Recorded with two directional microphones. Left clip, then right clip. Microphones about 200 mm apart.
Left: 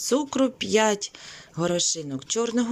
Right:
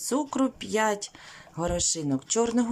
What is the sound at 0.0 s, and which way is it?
Speech, 5° right (ahead or behind).